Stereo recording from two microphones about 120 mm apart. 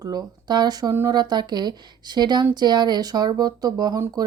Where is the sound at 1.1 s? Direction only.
35° right (ahead or behind).